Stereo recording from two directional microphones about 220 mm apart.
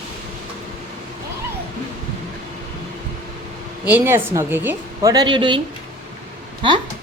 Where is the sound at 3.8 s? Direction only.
10° right (ahead or behind).